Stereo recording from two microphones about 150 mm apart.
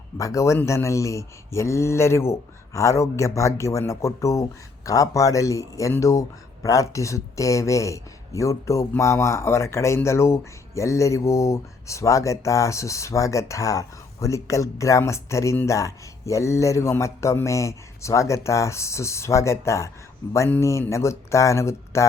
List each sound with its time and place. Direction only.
0.2 s speech: 20° left (ahead or behind)